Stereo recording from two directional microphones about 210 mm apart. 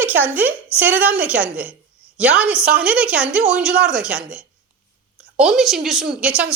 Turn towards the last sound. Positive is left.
turn(degrees=-5)  # may be behind; listen again after turning